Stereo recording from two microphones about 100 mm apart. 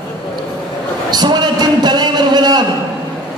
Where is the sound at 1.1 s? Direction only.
45° right (ahead or behind).